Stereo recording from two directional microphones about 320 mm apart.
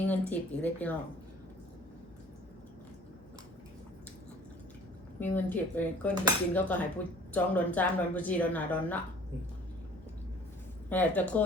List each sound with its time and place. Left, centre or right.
0.1 s cutlery: centre
5.2 s cutlery: centre
10.8 s cutlery: centre